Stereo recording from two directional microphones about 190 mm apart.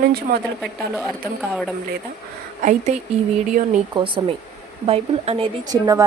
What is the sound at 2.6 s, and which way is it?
Speech, 40° right (ahead or behind).